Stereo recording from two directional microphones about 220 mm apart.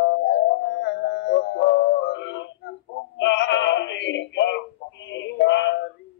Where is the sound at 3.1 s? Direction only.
55° left (ahead or behind).